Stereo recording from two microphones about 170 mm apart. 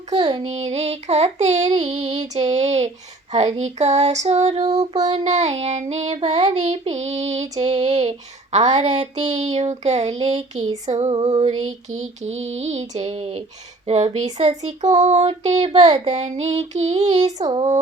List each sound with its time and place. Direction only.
0.3 s child singing: 35° right (ahead or behind)
10.8 s female singing: 45° right (ahead or behind)
11.1 s female singing: 25° right (ahead or behind)
11.4 s child singing: 40° right (ahead or behind)